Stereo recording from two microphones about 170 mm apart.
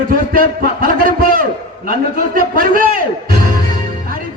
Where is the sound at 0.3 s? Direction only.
60° right (ahead or behind).